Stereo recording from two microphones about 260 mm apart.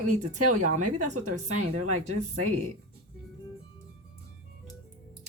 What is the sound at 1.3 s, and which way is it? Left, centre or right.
Speech, right.